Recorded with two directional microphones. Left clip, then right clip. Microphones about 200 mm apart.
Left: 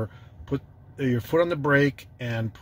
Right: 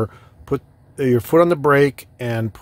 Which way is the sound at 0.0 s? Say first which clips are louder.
Right 10 dB; 40° right (ahead or behind).